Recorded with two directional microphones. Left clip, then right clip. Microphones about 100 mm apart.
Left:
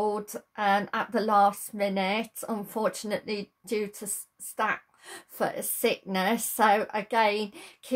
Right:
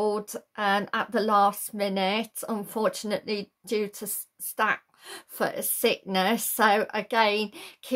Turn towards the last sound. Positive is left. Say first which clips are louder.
# right 3 dB
turn(degrees=-15)  # may be behind; listen again after turning